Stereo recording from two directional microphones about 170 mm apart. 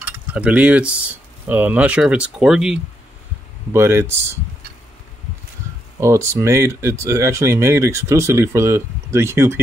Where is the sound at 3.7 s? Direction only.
15° right (ahead or behind).